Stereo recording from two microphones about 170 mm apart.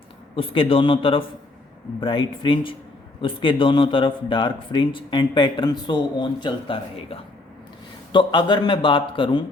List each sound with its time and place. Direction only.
0.3 s a man's voice: 30° left (ahead or behind)